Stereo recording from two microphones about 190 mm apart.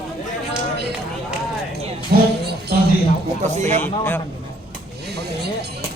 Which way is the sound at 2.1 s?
60° right (ahead or behind).